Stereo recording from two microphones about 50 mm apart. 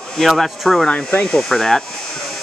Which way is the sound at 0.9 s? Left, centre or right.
Centre.